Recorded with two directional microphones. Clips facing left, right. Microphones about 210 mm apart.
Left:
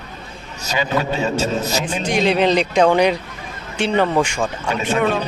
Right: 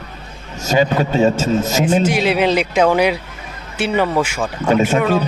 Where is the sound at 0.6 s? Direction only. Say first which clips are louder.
Right 5 dB; 45° right (ahead or behind).